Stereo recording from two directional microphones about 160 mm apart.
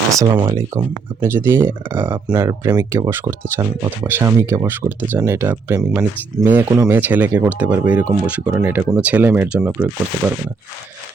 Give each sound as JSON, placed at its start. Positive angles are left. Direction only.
{"t": 0.2, "sound": "speech", "side_deg": -25}
{"t": 0.8, "sound": "speech", "side_deg": -15}